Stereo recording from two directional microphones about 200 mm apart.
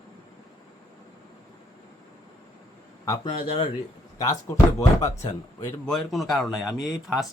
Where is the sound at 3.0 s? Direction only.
20° left (ahead or behind).